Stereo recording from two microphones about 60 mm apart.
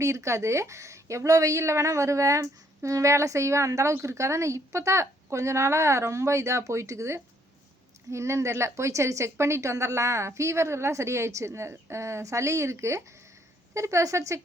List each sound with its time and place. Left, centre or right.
0.0 s a woman's voice: right